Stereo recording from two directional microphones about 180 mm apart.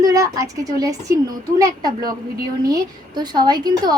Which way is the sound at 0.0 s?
20° right (ahead or behind).